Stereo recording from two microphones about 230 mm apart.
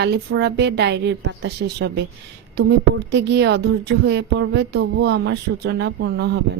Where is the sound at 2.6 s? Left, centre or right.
Right.